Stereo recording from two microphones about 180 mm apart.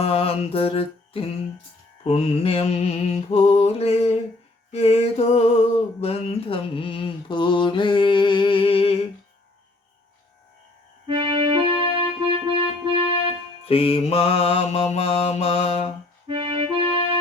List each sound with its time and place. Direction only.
0.0 s mantra: 30° left (ahead or behind)
4.7 s a sound: 35° left (ahead or behind)
11.0 s keyboard: 30° right (ahead or behind)
13.7 s mantra: 30° left (ahead or behind)
16.2 s music: 30° right (ahead or behind)